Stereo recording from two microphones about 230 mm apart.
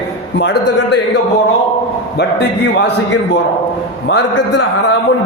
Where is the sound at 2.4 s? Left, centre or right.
Left.